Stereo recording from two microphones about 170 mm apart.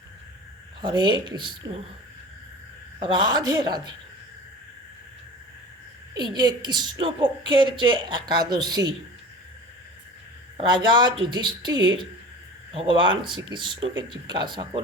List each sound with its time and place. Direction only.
0.8 s a woman's voice: 25° right (ahead or behind)
3.0 s a woman's voice: 25° right (ahead or behind)
6.1 s a woman's voice: 25° right (ahead or behind)
10.6 s a woman's voice: 25° right (ahead or behind)